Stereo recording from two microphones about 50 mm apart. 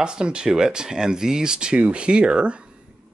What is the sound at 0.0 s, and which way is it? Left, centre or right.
Speech, centre.